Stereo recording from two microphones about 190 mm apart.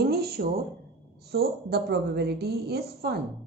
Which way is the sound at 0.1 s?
55° right (ahead or behind).